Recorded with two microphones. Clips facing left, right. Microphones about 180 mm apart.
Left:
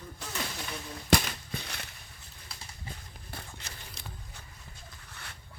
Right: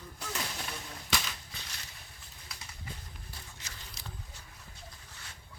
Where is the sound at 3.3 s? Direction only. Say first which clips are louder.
Left 9 dB; 60° left (ahead or behind).